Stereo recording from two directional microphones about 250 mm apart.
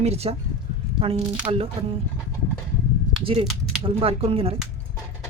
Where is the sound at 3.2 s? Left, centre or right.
Right.